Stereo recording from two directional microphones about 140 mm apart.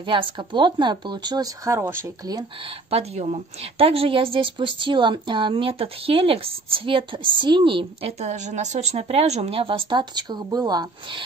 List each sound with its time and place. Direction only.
0.0 s a woman's voice: 35° right (ahead or behind); by 2.3 s 20° right (ahead or behind)
2.9 s a woman's voice: 50° right (ahead or behind)
8.2 s a woman's voice: 55° right (ahead or behind); by 11.2 s 30° right (ahead or behind)